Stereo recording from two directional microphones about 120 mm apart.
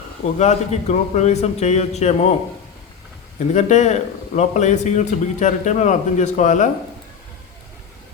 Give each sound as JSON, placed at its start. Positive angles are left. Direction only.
{"t": 0.3, "sound": "a man's voice", "side_deg": 70}
{"t": 3.5, "sound": "a man's voice", "side_deg": 80}